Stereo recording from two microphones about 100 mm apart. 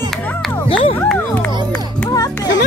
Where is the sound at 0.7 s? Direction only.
65° left (ahead or behind).